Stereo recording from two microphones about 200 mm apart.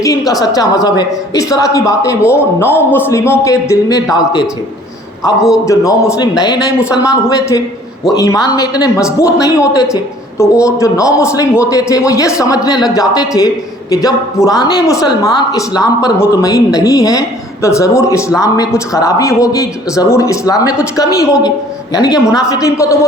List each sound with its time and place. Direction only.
0.0 s speech: 15° left (ahead or behind)
5.6 s a woman's voice: 15° left (ahead or behind)